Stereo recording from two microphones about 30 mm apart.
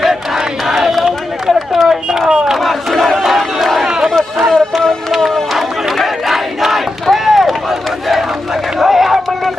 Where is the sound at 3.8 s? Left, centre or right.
Centre.